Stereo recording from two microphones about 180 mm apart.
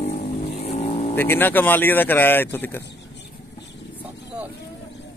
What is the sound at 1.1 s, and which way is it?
Speech, 10° left (ahead or behind).